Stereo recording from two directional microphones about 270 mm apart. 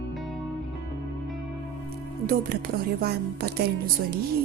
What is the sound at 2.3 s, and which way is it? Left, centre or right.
Speech, right.